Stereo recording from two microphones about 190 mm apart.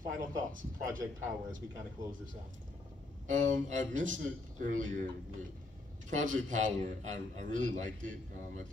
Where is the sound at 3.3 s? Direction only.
40° right (ahead or behind).